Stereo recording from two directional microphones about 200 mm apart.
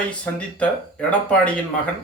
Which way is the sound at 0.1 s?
5° left (ahead or behind).